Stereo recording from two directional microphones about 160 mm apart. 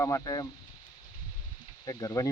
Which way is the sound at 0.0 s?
20° left (ahead or behind).